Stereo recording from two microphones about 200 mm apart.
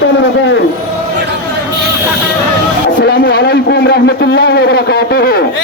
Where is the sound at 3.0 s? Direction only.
45° left (ahead or behind).